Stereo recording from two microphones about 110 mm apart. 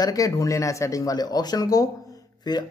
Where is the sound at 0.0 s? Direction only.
35° left (ahead or behind).